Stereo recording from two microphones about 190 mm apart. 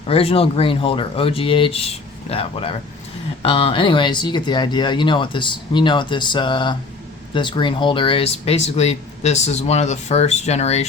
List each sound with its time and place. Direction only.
0.1 s speech: 30° left (ahead or behind)